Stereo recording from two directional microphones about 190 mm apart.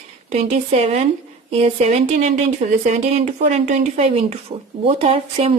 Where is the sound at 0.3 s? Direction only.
35° right (ahead or behind).